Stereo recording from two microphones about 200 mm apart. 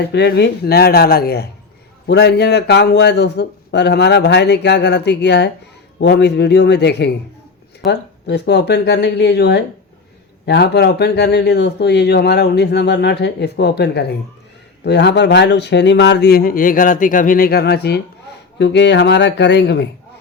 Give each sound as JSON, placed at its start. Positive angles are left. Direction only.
{"t": 0.0, "sound": "a man's voice", "side_deg": 55}